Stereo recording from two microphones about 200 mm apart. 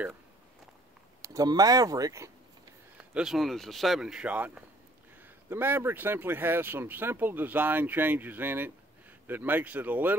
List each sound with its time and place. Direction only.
1.2 s speech: 15° right (ahead or behind)
3.0 s speech: 5° right (ahead or behind)